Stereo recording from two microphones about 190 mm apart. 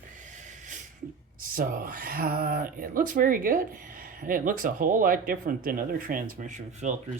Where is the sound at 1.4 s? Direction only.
50° right (ahead or behind).